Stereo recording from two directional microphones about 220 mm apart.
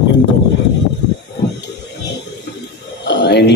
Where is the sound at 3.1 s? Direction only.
50° left (ahead or behind).